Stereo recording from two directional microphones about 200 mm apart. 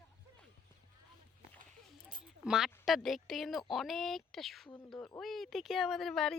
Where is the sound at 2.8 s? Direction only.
Centre (ahead or behind).